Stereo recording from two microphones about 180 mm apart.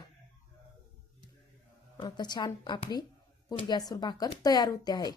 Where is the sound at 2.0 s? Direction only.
25° left (ahead or behind).